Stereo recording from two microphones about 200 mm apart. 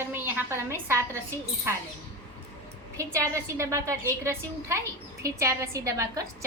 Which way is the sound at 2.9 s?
15° right (ahead or behind).